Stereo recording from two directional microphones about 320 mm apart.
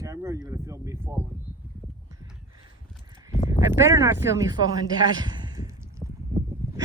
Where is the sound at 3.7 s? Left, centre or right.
Centre.